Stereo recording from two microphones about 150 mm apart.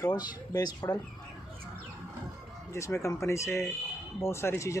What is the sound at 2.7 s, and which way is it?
Speech, 20° left (ahead or behind).